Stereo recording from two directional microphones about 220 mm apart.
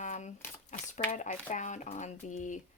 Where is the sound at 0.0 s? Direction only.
35° left (ahead or behind).